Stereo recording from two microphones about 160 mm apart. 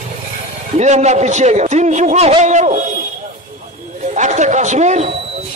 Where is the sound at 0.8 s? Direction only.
45° right (ahead or behind).